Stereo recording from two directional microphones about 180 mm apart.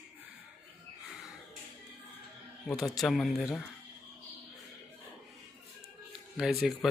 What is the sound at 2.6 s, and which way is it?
Speech, centre (ahead or behind).